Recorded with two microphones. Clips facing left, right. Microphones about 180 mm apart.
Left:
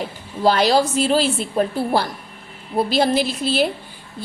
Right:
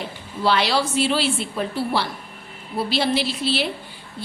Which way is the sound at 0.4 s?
45° left (ahead or behind).